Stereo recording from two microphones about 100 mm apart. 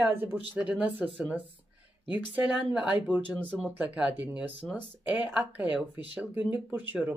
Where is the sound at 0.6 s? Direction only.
15° right (ahead or behind).